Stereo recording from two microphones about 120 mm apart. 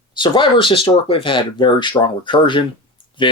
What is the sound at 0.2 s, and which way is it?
Speech, 45° left (ahead or behind).